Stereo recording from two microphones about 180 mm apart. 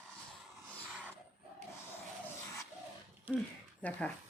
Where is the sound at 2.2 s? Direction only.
15° left (ahead or behind).